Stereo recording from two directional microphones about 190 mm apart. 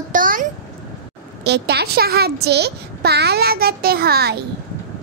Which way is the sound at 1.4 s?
60° right (ahead or behind).